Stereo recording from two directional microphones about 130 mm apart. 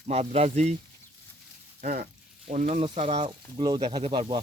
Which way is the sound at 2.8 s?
50° right (ahead or behind).